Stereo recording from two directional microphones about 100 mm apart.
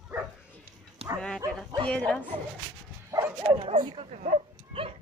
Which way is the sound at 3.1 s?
35° right (ahead or behind).